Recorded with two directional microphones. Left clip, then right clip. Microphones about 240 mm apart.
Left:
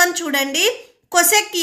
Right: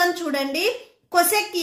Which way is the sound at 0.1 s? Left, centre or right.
Left.